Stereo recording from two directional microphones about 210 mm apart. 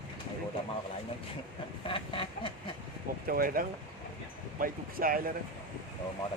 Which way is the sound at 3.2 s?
45° right (ahead or behind).